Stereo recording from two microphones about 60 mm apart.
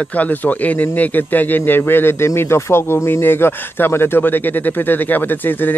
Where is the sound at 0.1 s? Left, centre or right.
Left.